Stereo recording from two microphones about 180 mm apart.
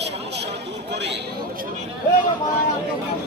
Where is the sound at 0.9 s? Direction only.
75° right (ahead or behind).